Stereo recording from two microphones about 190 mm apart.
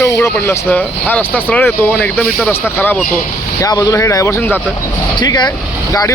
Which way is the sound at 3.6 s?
20° left (ahead or behind).